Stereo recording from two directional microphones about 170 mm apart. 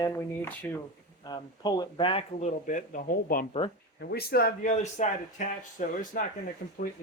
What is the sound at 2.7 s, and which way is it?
Speech, 50° left (ahead or behind).